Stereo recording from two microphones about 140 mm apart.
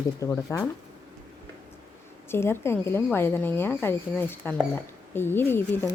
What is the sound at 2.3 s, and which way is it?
Speech, 20° left (ahead or behind).